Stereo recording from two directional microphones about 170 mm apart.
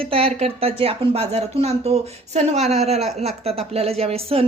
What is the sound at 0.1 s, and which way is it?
Speech, 35° right (ahead or behind).